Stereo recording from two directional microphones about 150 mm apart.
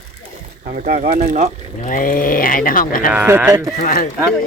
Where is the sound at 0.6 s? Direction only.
65° right (ahead or behind).